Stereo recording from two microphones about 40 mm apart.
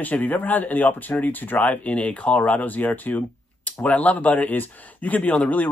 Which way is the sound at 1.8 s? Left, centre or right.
Left.